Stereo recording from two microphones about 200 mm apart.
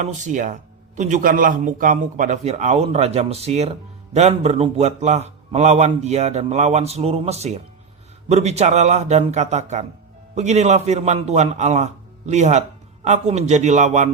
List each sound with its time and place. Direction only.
0.0 s a man's voice: 40° right (ahead or behind)